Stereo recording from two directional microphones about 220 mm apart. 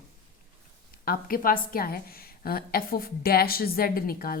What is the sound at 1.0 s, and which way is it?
A woman's voice, 40° left (ahead or behind).